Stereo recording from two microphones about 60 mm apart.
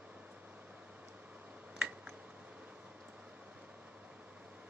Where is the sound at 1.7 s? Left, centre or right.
Right.